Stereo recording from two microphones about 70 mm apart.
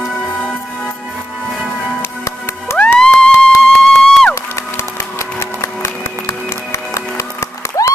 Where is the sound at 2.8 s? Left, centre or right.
Centre.